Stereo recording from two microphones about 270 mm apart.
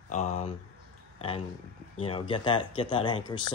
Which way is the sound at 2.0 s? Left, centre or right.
Centre.